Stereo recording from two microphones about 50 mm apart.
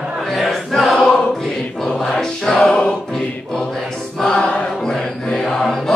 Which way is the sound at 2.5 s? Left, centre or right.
Left.